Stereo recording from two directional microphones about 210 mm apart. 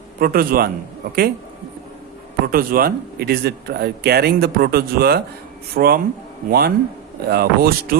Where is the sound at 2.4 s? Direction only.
45° right (ahead or behind).